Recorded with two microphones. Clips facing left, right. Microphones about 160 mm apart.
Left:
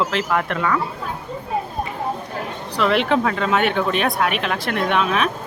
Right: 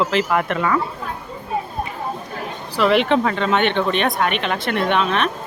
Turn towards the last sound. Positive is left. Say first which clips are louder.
# even
turn(degrees=5)  # may be behind; listen again after turning